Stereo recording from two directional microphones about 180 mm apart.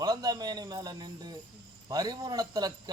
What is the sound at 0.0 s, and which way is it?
A man's voice, 20° right (ahead or behind).